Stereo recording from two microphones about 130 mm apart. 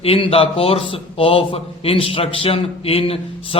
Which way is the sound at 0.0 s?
45° left (ahead or behind).